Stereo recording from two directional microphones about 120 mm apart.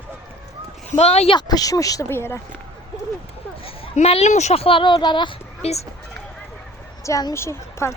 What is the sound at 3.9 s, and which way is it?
Speech, 65° left (ahead or behind).